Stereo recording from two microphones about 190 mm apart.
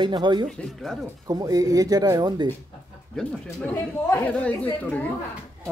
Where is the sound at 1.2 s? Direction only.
20° right (ahead or behind).